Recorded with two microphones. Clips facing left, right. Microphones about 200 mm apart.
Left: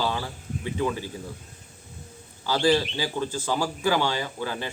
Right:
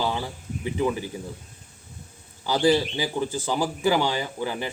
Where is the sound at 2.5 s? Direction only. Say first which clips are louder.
Right 1 dB; 15° right (ahead or behind).